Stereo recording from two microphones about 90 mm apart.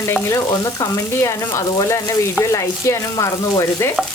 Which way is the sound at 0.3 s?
40° left (ahead or behind).